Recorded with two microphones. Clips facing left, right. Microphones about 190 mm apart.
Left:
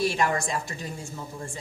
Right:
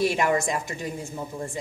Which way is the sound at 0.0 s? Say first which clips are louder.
Right 3 dB; 15° right (ahead or behind).